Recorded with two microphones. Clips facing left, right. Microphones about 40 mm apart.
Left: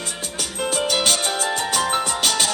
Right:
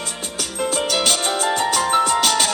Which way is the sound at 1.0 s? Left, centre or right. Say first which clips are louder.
Right 2 dB; right.